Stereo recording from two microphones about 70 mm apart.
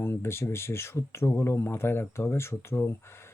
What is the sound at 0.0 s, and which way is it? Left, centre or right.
Speech, left.